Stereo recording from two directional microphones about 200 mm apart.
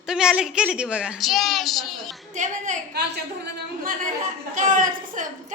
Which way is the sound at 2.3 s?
40° right (ahead or behind).